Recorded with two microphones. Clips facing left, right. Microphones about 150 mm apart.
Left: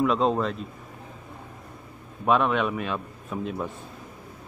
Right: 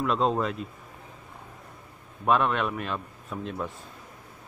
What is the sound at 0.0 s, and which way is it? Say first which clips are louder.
Speech: left 3 dB; centre (ahead or behind).